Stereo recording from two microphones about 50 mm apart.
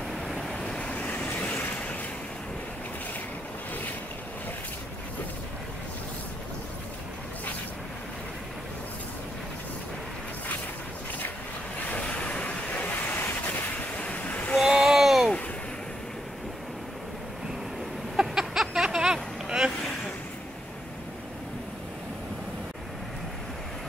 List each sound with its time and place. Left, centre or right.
0.1 s vehicle: centre
0.6 s waves: left
11.9 s waves: left
13.9 s vehicle: left
14.6 s a sound: centre
18.2 s a sound: centre
18.7 s vehicle: centre